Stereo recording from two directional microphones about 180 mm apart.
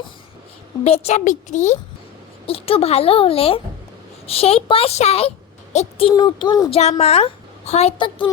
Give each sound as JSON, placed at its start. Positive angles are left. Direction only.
{"t": 0.9, "sound": "a woman's voice", "side_deg": 35}
{"t": 5.7, "sound": "a sound", "side_deg": 35}
{"t": 6.7, "sound": "a woman's voice", "side_deg": 35}